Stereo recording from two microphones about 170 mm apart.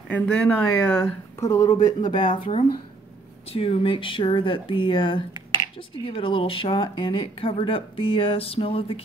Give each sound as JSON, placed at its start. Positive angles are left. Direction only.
{"t": 0.1, "sound": "speech", "side_deg": 10}
{"t": 1.4, "sound": "speech", "side_deg": 20}